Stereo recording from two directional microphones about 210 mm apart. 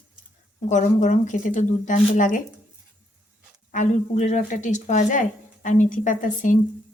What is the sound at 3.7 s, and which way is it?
Speech, 35° left (ahead or behind).